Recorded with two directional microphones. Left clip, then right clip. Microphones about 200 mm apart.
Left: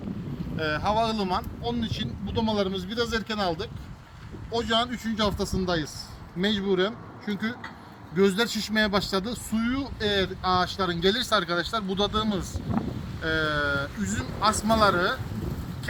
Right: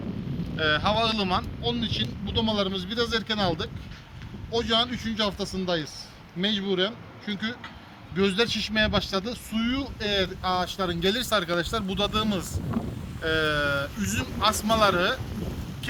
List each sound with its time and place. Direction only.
0.5 s speech: centre (ahead or behind)